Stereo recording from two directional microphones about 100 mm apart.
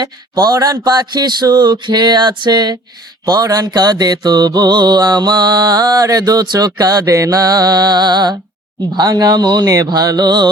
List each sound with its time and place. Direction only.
0.0 s mantra: 40° right (ahead or behind)